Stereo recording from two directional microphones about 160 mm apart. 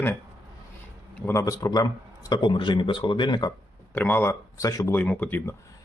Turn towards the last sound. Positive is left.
turn(degrees=10)  # may be behind; listen again after turning